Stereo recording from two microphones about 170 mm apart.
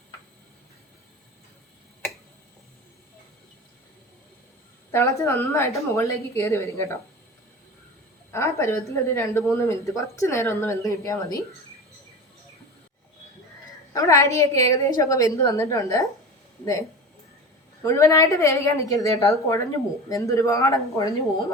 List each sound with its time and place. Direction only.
4.9 s a woman's voice: 15° left (ahead or behind)
8.3 s a woman's voice: 15° left (ahead or behind)
13.9 s speech: 20° left (ahead or behind)
17.8 s a woman's voice: 15° left (ahead or behind)